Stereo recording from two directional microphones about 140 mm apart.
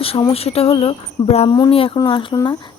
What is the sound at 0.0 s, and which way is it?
Speech, 40° left (ahead or behind).